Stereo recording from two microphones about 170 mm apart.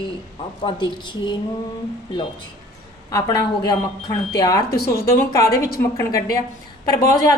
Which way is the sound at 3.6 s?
25° left (ahead or behind).